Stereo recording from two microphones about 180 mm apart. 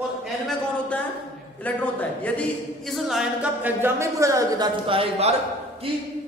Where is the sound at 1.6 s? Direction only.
10° left (ahead or behind); by 4.6 s 15° right (ahead or behind).